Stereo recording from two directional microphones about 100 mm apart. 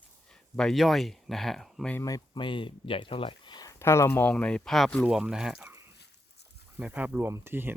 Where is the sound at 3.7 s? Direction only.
25° left (ahead or behind).